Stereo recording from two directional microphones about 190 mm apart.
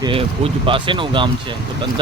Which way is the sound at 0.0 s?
30° right (ahead or behind).